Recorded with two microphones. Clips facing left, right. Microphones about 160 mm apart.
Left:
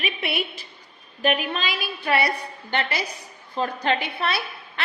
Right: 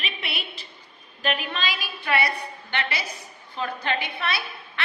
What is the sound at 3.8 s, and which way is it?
Speech, 55° left (ahead or behind).